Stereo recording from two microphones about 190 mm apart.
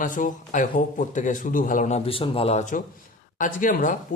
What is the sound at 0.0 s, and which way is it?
Speech, 45° left (ahead or behind).